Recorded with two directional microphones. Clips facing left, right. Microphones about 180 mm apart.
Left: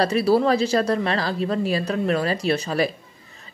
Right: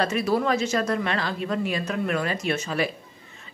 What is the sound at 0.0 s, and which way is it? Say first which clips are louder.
A woman's voice: left 5 dB; 35° left (ahead or behind).